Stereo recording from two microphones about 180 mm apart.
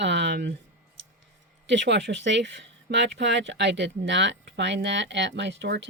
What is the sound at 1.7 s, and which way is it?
Speech, 80° right.